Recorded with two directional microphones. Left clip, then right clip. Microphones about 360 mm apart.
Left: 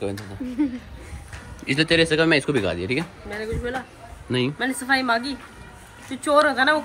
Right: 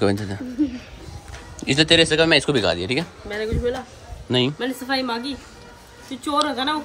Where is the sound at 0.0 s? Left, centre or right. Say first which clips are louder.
Right 8 dB; right.